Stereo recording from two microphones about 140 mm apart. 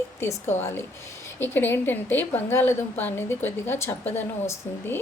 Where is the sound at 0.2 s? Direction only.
20° left (ahead or behind).